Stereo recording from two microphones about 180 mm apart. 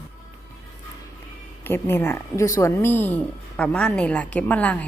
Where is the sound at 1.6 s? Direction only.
10° left (ahead or behind).